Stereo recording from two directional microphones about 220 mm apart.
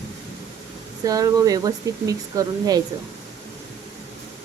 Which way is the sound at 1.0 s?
15° right (ahead or behind).